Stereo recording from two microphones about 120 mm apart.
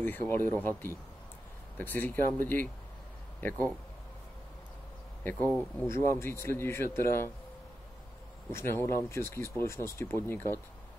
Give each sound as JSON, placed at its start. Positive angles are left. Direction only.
{"t": 0.0, "sound": "speech", "side_deg": 15}
{"t": 5.2, "sound": "speech", "side_deg": 15}
{"t": 8.5, "sound": "speech", "side_deg": 20}